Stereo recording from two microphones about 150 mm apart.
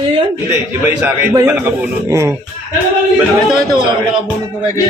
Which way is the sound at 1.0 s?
20° right (ahead or behind).